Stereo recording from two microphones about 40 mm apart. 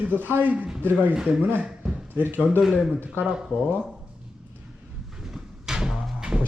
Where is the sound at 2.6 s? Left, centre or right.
Centre.